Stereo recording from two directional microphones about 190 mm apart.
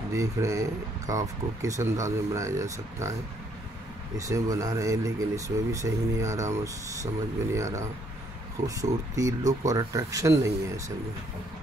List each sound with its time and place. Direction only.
0.1 s speech: 15° right (ahead or behind)
4.2 s speech: 15° right (ahead or behind)